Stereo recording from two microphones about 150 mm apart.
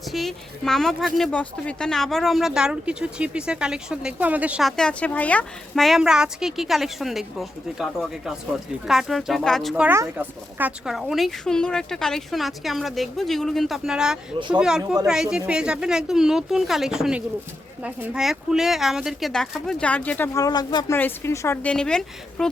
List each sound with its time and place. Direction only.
0.1 s a woman's voice: centre (ahead or behind)
4.8 s a woman's voice: 5° left (ahead or behind)
9.8 s speech: 15° right (ahead or behind)
10.9 s a woman's voice: centre (ahead or behind)
20.4 s speech: 30° left (ahead or behind)
20.9 s a woman's voice: 15° left (ahead or behind)